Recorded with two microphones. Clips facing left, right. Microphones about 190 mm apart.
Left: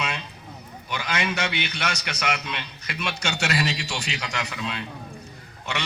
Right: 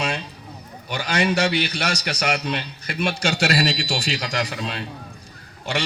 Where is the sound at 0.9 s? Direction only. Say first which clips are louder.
Right 6 dB; 35° right (ahead or behind).